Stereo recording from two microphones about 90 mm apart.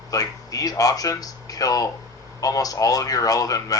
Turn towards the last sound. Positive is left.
turn(degrees=40)  # may be behind; listen again after turning